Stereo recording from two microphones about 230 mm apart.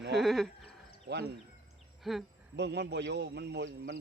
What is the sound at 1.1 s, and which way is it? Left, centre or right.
Speech, right.